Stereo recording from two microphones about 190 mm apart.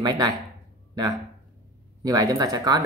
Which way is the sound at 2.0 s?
20° right (ahead or behind).